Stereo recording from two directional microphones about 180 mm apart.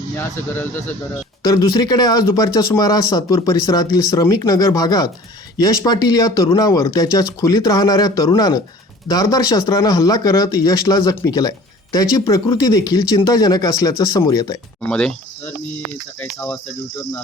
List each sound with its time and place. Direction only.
0.2 s speech: 10° left (ahead or behind)
14.8 s speech: 5° left (ahead or behind)